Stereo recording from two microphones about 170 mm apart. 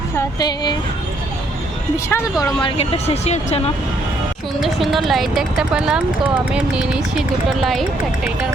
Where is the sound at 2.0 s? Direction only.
20° left (ahead or behind).